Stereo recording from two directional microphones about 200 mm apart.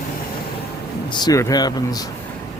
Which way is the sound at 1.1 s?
20° left (ahead or behind).